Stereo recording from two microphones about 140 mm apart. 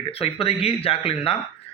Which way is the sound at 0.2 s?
45° left (ahead or behind).